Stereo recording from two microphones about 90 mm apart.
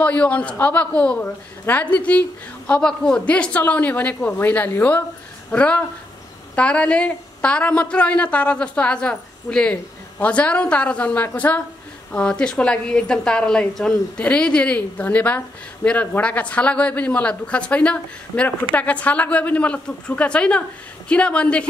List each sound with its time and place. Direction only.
0.0 s a woman's voice: 15° left (ahead or behind)